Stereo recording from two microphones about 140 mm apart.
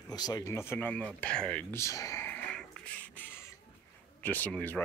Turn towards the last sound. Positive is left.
turn(degrees=10)  # may be behind; listen again after turning